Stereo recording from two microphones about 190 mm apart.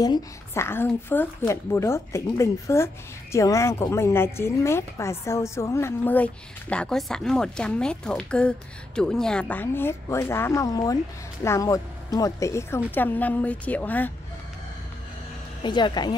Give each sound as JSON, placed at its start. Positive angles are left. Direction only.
{"t": 0.0, "sound": "a woman's voice", "side_deg": 15}
{"t": 15.6, "sound": "speech", "side_deg": 25}